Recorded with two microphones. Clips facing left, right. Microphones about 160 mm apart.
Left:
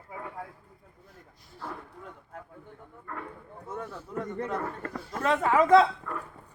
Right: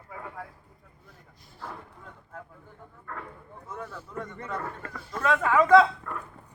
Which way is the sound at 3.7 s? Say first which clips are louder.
Left 2 dB; 35° left (ahead or behind).